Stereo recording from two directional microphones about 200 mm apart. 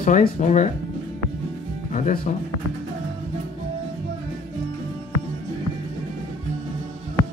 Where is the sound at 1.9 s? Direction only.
40° left (ahead or behind).